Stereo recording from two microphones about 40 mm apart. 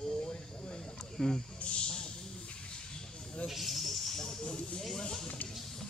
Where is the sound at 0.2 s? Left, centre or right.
Centre.